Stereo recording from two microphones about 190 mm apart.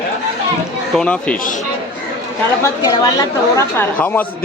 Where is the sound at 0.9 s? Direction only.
5° left (ahead or behind).